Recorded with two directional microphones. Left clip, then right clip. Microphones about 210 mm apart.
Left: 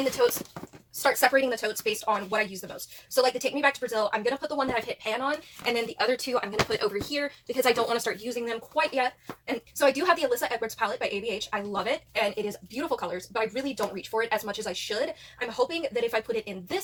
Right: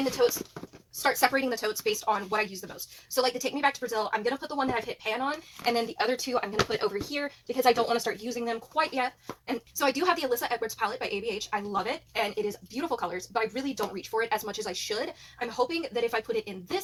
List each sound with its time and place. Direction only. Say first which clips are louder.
1.0 s a woman's voice: left 3 dB; 30° right (ahead or behind)